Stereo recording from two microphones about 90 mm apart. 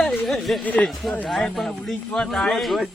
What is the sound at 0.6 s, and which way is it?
Speech, 15° left (ahead or behind).